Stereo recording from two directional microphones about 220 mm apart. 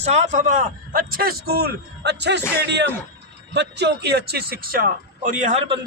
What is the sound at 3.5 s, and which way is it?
A man's voice, 50° right (ahead or behind).